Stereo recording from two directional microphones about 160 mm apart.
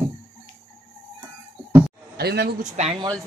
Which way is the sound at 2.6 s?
45° right (ahead or behind).